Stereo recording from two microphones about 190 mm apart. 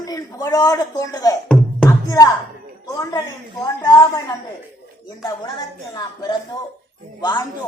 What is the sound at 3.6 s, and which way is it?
Speech, 20° left (ahead or behind).